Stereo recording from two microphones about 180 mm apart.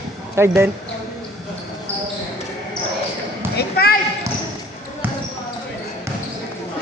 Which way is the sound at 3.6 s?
60° left (ahead or behind).